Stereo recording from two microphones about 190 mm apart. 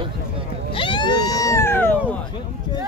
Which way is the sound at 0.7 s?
25° left (ahead or behind).